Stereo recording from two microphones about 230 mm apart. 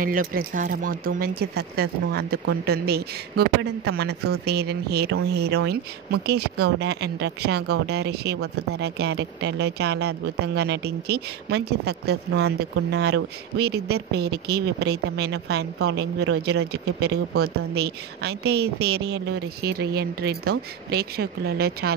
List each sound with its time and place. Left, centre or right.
0.0 s speech: right